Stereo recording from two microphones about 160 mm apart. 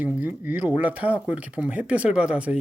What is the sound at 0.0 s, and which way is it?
Speech, 10° right (ahead or behind).